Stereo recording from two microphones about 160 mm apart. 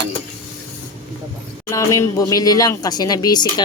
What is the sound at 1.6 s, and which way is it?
Speech, 20° left (ahead or behind).